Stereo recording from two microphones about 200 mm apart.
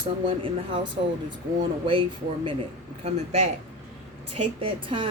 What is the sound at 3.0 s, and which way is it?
Speech, 30° right (ahead or behind).